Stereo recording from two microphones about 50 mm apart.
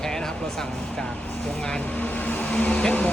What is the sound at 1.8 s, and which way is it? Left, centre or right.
Speech, left.